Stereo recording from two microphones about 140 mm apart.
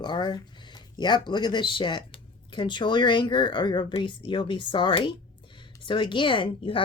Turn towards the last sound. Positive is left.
turn(degrees=40)  # may be behind; listen again after turning